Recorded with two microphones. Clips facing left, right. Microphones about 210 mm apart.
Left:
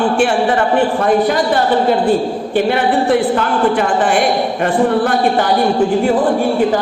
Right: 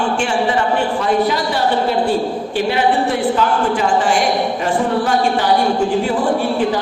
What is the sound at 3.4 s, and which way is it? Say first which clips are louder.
A man's voice: left 2 dB; 55° left (ahead or behind).